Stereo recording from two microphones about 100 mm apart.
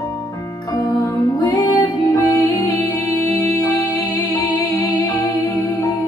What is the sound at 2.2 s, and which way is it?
Music, 35° left (ahead or behind).